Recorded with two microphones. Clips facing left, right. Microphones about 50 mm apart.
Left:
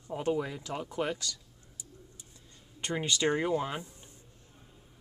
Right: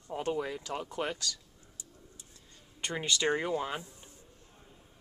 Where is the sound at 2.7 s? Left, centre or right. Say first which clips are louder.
Left 1 dB; centre.